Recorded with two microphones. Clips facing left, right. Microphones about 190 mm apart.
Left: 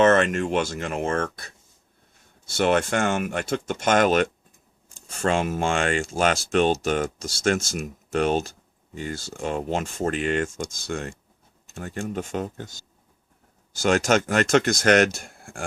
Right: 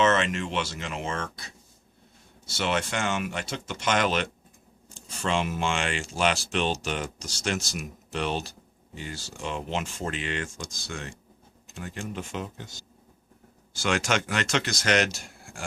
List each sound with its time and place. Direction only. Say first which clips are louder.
0.0 s speech: left 6 dB; 50° left (ahead or behind)
13.7 s speech: left 6 dB; 40° left (ahead or behind)